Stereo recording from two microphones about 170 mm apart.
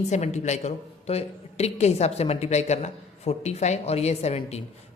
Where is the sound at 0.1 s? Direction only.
45° left (ahead or behind).